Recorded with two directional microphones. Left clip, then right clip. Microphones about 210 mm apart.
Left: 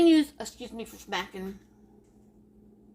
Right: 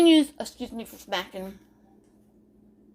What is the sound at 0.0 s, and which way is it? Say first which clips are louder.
A woman's voice: right 3 dB; 35° right (ahead or behind).